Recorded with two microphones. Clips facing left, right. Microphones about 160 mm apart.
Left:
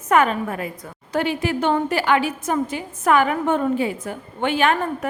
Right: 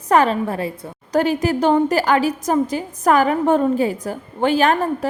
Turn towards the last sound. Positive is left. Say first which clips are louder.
# right 3 dB
turn(degrees=-35)  # may be behind; listen again after turning